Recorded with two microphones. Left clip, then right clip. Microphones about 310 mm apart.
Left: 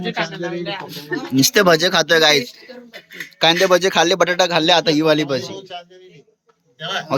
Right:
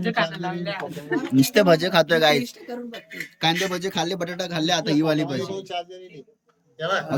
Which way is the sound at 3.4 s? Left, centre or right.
Centre.